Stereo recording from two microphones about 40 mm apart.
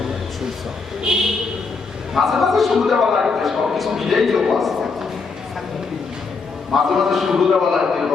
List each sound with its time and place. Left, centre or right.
1.1 s a sound: centre
2.1 s a man's voice: centre
6.7 s a man's voice: centre